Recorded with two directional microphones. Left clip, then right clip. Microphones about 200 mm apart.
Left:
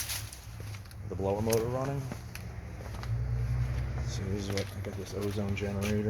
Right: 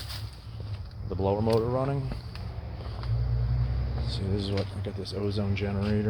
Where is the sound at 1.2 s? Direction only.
20° right (ahead or behind).